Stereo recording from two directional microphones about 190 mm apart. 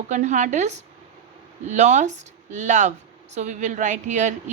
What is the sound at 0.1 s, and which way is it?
A woman's voice, 40° right (ahead or behind).